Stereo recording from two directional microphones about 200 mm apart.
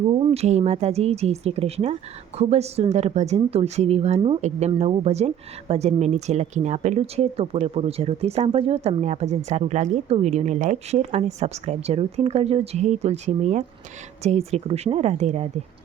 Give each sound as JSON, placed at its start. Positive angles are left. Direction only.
{"t": 0.3, "sound": "a woman's voice", "side_deg": -35}